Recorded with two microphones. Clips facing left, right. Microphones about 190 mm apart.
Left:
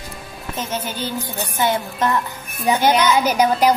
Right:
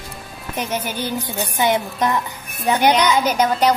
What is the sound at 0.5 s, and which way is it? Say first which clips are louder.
Music: right 2 dB; 15° right (ahead or behind).